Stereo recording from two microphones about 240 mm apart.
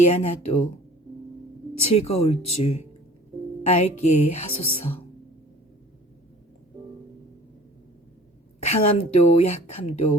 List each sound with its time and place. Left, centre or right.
0.0 s speech: left
1.7 s speech: left
2.0 s speech: left
4.0 s speech: left
4.7 s speech: left
8.6 s speech: left